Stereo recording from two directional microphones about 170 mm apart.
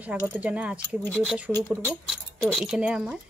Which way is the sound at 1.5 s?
10° left (ahead or behind).